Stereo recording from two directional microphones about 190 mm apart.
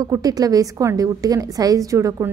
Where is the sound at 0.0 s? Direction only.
20° right (ahead or behind).